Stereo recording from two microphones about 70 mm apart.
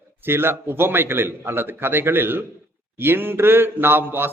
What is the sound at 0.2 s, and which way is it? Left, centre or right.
A man's voice, right.